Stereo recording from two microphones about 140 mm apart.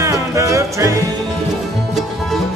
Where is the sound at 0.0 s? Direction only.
20° right (ahead or behind).